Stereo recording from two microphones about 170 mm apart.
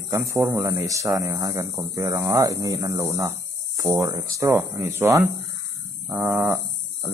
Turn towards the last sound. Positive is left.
turn(degrees=-20)  # may be behind; listen again after turning